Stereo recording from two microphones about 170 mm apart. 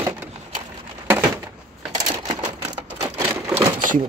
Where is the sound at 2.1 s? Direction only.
25° right (ahead or behind).